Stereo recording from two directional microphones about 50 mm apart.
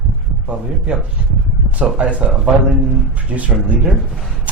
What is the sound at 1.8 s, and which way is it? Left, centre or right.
Speech, right.